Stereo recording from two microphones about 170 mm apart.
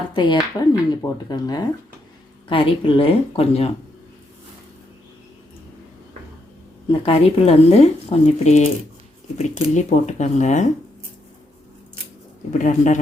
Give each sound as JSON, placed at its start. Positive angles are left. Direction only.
{"t": 0.1, "sound": "speech", "side_deg": 25}
{"t": 7.0, "sound": "speech", "side_deg": 35}
{"t": 12.5, "sound": "speech", "side_deg": 45}